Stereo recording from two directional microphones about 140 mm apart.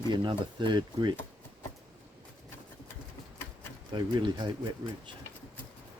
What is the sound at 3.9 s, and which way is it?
Speech, 30° right (ahead or behind).